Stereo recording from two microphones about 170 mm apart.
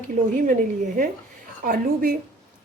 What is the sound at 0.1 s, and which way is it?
Speech, 50° right (ahead or behind).